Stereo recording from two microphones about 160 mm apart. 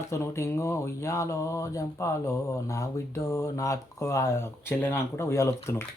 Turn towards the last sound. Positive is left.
turn(degrees=15)  # may be behind; listen again after turning